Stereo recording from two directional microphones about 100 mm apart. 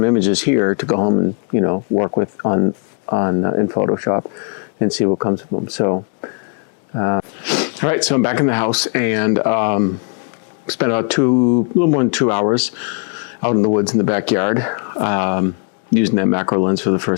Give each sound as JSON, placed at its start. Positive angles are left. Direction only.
{"t": 0.0, "sound": "speech", "side_deg": 20}
{"t": 7.4, "sound": "speech", "side_deg": 15}